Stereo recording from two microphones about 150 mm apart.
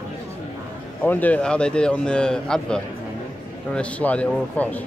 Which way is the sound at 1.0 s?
10° left (ahead or behind).